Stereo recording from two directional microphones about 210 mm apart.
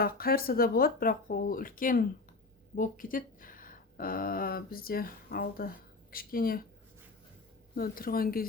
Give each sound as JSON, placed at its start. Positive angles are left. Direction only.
{"t": 0.0, "sound": "speech", "side_deg": 45}
{"t": 7.8, "sound": "speech", "side_deg": 45}